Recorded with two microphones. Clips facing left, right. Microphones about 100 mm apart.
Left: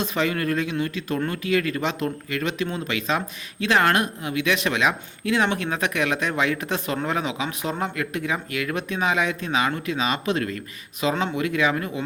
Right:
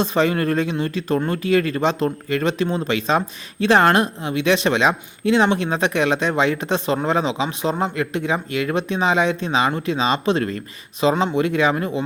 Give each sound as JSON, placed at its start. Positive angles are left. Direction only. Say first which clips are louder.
{"t": 0.0, "sound": "speech", "louder": "right 5 dB", "side_deg": -35}
{"t": 11.1, "sound": "speech", "louder": "right 3 dB", "side_deg": -20}
{"t": 11.3, "sound": "speech", "louder": "right 4 dB", "side_deg": -30}